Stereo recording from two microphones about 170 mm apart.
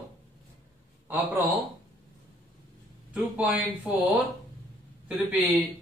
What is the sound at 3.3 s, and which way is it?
Speech, 10° right (ahead or behind).